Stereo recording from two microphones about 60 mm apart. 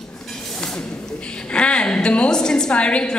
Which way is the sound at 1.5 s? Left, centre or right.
Centre.